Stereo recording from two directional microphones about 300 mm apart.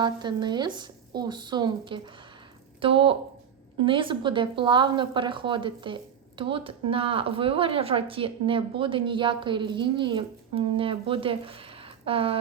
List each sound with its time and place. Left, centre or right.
0.0 s speech: centre